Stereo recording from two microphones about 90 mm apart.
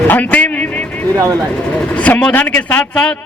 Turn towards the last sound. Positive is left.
turn(degrees=10)  # may be behind; listen again after turning